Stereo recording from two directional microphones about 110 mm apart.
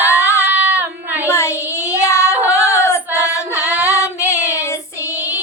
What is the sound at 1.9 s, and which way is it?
Child singing, 25° left (ahead or behind).